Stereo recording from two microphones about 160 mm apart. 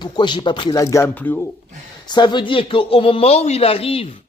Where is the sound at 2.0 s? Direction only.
25° left (ahead or behind).